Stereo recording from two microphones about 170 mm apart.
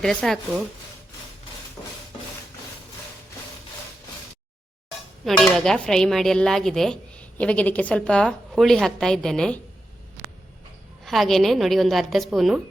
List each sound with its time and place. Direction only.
0.0 s speech: 5° left (ahead or behind)
5.2 s speech: centre (ahead or behind)
11.0 s speech: centre (ahead or behind)